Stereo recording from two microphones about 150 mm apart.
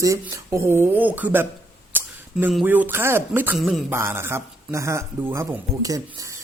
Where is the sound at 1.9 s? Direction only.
15° right (ahead or behind).